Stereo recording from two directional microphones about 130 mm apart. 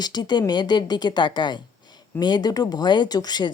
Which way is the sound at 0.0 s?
35° left (ahead or behind).